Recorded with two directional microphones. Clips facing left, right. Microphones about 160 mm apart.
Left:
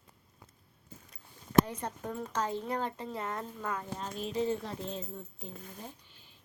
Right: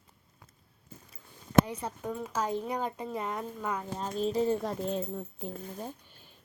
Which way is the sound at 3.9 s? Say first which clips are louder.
Right 7 dB; 35° right (ahead or behind).